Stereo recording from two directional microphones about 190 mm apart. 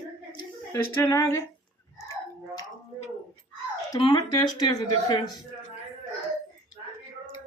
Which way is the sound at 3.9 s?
25° left (ahead or behind).